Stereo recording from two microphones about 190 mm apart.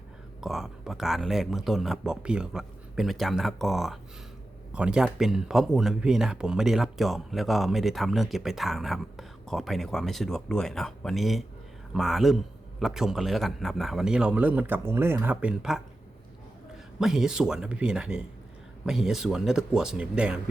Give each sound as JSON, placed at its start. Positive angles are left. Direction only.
{"t": 0.4, "sound": "speech", "side_deg": 0}
{"t": 17.0, "sound": "speech", "side_deg": -5}